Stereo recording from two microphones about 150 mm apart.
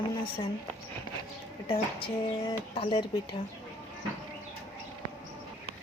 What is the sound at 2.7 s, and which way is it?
Speech, 40° left (ahead or behind).